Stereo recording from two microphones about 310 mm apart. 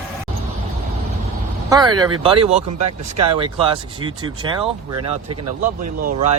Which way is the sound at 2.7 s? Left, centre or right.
Right.